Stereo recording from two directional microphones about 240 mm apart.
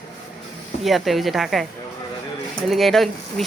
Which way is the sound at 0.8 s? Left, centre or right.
Centre.